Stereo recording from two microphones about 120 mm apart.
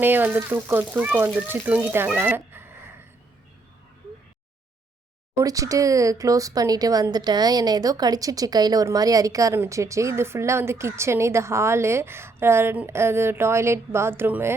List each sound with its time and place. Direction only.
0.0 s speech: 15° right (ahead or behind)
5.4 s speech: 30° right (ahead or behind)